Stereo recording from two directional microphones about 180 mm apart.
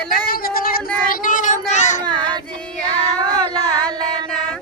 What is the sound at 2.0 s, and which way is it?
Child singing, 25° right (ahead or behind).